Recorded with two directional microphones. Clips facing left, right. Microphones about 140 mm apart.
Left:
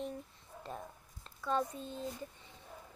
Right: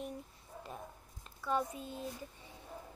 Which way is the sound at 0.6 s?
10° right (ahead or behind).